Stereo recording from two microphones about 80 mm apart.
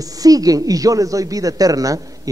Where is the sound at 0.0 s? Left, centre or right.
Right.